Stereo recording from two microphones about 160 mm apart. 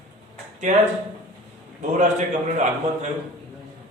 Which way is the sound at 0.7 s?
50° right (ahead or behind).